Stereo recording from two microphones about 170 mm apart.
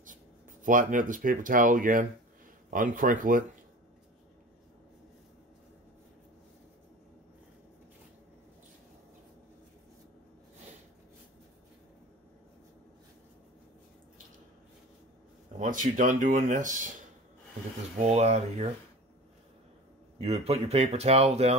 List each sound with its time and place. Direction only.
0.7 s speech: 50° right (ahead or behind)
15.6 s speech: 50° right (ahead or behind)
18.0 s speech: 40° right (ahead or behind)
20.2 s speech: 35° right (ahead or behind)